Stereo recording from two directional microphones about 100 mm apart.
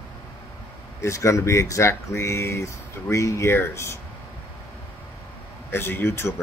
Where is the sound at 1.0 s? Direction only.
30° left (ahead or behind).